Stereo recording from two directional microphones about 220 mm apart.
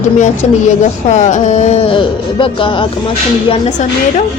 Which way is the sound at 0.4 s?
25° left (ahead or behind).